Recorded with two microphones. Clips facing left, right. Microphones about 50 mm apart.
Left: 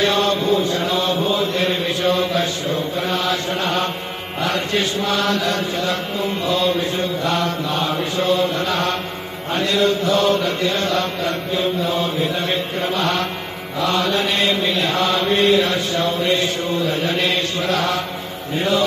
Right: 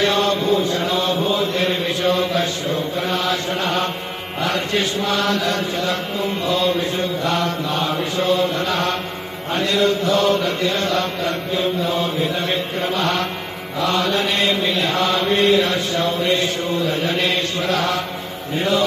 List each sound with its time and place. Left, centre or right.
0.0 s chant: right
3.1 s mantra: right
5.0 s mantra: right
6.4 s a sound: centre
7.2 s mantra: right